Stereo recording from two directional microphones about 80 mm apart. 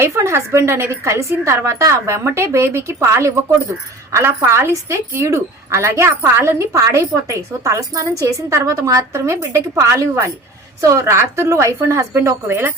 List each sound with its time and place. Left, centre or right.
0.0 s a woman's voice: right